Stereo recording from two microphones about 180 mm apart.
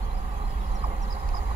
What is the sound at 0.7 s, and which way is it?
Train, 40° right (ahead or behind).